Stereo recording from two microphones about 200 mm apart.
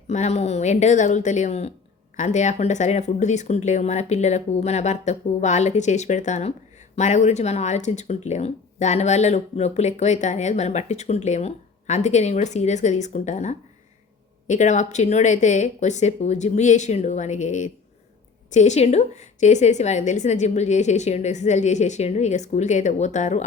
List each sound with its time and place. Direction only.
0.1 s speech: 35° left (ahead or behind)